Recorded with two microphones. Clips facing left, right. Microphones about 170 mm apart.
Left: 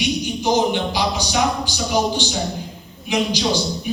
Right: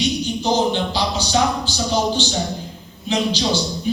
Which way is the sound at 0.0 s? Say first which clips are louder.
Even; 10° left (ahead or behind).